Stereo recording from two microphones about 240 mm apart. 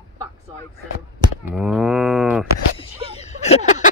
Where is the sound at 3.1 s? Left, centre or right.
Left.